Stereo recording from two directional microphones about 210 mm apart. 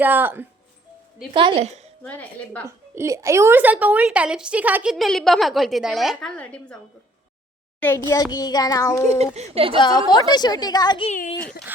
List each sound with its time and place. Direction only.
0.0 s speech: 10° right (ahead or behind)
1.3 s a woman's voice: 25° right (ahead or behind)
2.0 s child singing: 5° left (ahead or behind)
2.6 s a woman's voice: 15° right (ahead or behind); by 6.7 s 5° left (ahead or behind)
7.8 s a child's voice: 10° left (ahead or behind)
8.1 s child singing: 15° left (ahead or behind)
9.0 s a child's voice: 30° right (ahead or behind)
9.8 s a woman's voice: 20° left (ahead or behind)
11.1 s speech: 40° left (ahead or behind)